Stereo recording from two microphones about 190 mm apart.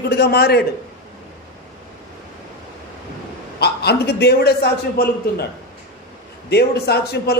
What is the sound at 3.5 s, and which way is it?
A man's voice, 60° left (ahead or behind).